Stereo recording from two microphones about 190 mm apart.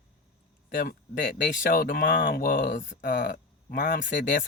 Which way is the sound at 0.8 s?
50° left (ahead or behind).